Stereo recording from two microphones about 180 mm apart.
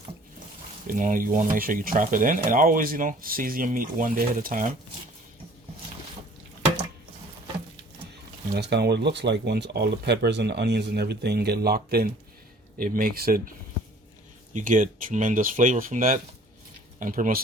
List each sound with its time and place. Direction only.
0.9 s speech: 45° right (ahead or behind)
8.5 s speech: 70° right (ahead or behind)
14.5 s speech: 50° right (ahead or behind)